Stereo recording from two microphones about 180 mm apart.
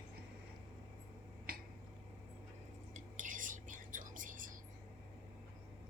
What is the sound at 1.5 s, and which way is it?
Finger snapping, 55° right (ahead or behind).